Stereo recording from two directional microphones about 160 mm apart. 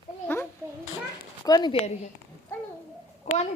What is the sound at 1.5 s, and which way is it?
A woman's voice, 25° left (ahead or behind).